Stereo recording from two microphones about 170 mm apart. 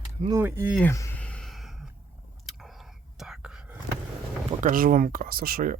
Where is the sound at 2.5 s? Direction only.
Centre (ahead or behind).